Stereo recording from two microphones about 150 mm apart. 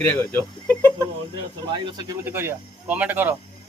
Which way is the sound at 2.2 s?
15° right (ahead or behind).